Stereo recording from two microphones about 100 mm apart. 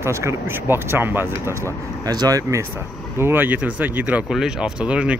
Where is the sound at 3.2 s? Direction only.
20° right (ahead or behind).